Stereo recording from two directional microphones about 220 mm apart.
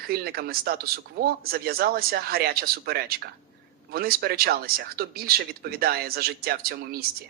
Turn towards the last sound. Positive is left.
turn(degrees=-40)  # may be behind; listen again after turning